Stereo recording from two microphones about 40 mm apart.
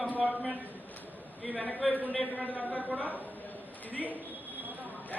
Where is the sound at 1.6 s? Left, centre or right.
Left.